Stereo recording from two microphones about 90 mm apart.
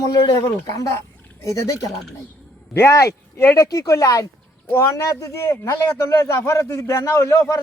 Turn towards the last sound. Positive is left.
turn(degrees=35)  # may be behind; listen again after turning